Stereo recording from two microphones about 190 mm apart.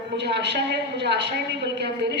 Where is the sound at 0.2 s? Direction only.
65° right (ahead or behind).